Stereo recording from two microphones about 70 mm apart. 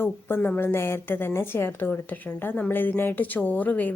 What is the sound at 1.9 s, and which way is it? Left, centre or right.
A woman's voice, left.